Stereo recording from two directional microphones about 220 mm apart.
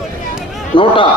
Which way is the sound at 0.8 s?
25° left (ahead or behind).